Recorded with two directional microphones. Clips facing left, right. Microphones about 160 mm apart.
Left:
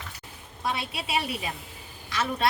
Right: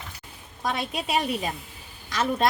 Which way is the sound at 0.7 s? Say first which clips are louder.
Right 3 dB; 45° right (ahead or behind).